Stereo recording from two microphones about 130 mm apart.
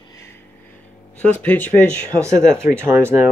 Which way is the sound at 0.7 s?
10° left (ahead or behind).